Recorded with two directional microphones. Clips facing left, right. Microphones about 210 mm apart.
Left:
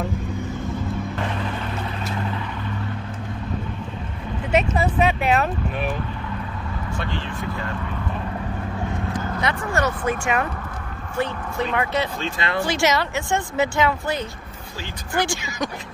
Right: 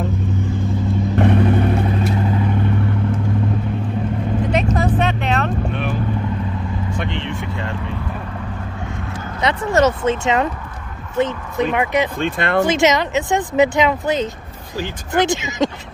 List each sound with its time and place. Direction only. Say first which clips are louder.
1.1 s vehicle: right 12 dB; 60° right (ahead or behind)
4.5 s vehicle: even; 5° left (ahead or behind)
7.0 s vehicle: right 3 dB; 20° right (ahead or behind)
9.4 s speech: right 9 dB; 20° right (ahead or behind)
12.2 s speech: right 7 dB; 55° right (ahead or behind)
12.6 s speech: right 5 dB; 20° right (ahead or behind)